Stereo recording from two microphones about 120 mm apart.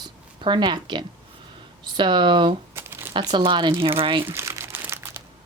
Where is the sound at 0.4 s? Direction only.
40° right (ahead or behind).